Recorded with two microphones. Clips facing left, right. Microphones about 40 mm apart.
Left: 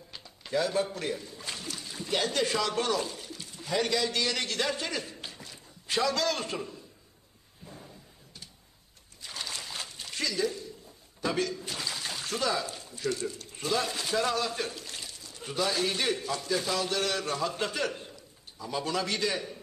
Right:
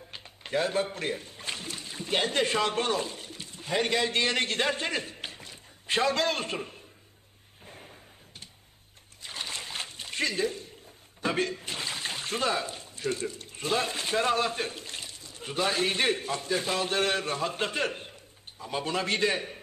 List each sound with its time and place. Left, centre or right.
0.1 s a man's voice: right
7.6 s a sound: right
9.2 s splash: right
11.1 s speech: right